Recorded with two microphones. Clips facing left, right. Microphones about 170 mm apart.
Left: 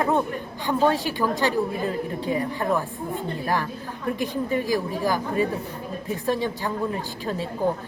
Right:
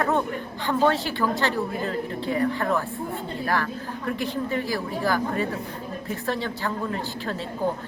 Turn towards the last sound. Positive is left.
turn(degrees=15)  # may be behind; listen again after turning